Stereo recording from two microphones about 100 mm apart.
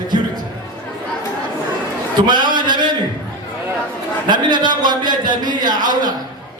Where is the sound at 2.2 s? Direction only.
50° right (ahead or behind).